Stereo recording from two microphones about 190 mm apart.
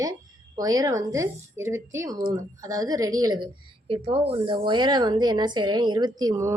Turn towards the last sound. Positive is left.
turn(degrees=-15)  # may be behind; listen again after turning